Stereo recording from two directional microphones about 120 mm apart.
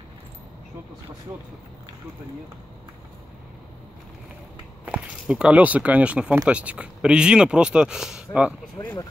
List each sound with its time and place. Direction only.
4.8 s speech: 10° right (ahead or behind)
8.8 s speech: 25° left (ahead or behind)